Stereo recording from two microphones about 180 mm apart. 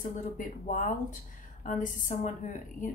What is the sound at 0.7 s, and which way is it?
A woman's voice, 45° left (ahead or behind).